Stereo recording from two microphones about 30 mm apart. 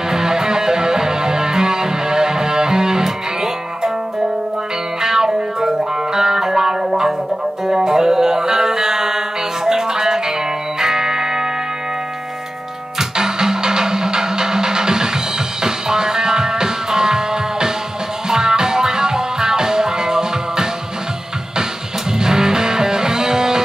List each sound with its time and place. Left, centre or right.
0.1 s music: centre
5.0 s music: centre
13.1 s music: right
22.2 s music: right